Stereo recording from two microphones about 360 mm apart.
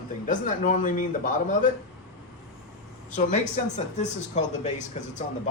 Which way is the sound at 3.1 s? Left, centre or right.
Centre.